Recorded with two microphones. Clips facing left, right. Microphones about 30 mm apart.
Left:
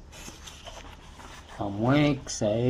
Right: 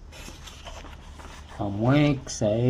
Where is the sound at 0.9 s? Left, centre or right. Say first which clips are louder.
Right 1 dB; centre.